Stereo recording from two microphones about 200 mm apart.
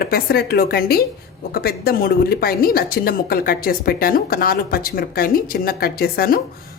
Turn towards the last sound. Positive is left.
turn(degrees=50)  # may be behind; listen again after turning